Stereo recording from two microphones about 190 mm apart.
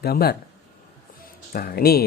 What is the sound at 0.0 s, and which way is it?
Speech, 55° left (ahead or behind).